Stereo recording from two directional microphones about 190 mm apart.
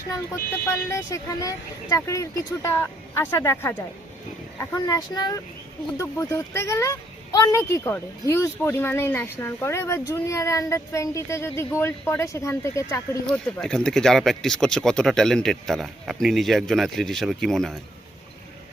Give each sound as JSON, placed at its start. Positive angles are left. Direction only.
{"t": 0.3, "sound": "speech", "side_deg": 15}
{"t": 13.2, "sound": "speech", "side_deg": 5}